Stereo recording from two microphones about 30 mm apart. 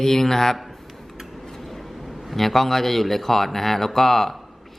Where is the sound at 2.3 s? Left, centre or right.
Centre.